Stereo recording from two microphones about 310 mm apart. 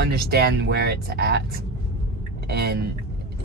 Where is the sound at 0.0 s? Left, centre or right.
Right.